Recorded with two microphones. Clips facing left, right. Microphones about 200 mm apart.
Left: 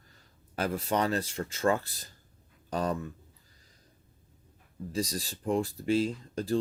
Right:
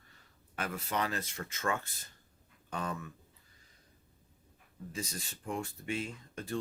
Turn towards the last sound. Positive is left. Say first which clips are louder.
# left 10 dB
turn(degrees=35)  # may be behind; listen again after turning